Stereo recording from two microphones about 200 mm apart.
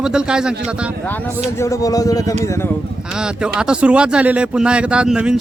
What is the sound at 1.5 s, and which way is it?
Speech, 15° left (ahead or behind).